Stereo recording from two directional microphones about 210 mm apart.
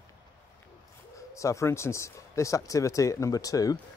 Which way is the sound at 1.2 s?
15° left (ahead or behind).